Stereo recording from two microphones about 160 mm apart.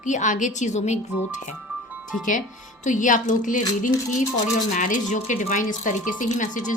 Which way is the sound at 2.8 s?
55° left (ahead or behind).